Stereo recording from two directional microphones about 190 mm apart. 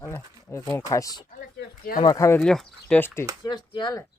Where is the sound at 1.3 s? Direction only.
50° left (ahead or behind).